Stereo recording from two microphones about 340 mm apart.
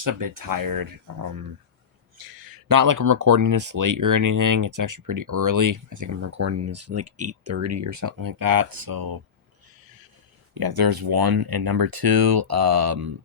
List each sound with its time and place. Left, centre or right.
0.0 s speech: right
2.1 s speech: right
10.5 s speech: right